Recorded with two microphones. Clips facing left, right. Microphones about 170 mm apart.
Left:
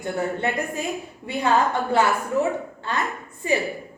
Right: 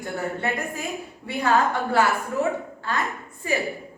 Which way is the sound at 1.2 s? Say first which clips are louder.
Left 1 dB; 20° left (ahead or behind).